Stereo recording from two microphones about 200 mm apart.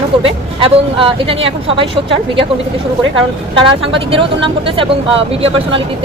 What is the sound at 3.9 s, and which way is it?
Speech, 25° right (ahead or behind).